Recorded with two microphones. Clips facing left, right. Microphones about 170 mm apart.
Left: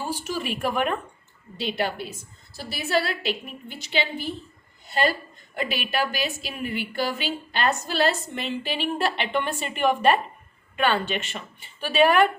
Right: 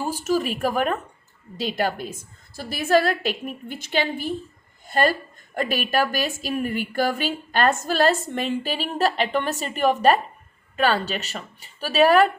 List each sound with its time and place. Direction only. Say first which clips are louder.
0.0 s a woman's voice: right 6 dB; 45° right (ahead or behind)